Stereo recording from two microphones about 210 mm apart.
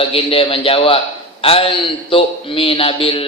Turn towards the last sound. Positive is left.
turn(degrees=25)  # may be behind; listen again after turning